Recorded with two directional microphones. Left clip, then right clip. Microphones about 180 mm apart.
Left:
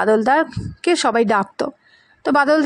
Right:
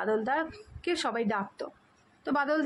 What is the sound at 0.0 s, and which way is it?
A woman's voice, 40° left (ahead or behind).